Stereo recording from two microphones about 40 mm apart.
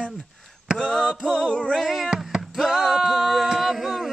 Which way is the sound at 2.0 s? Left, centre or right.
Right.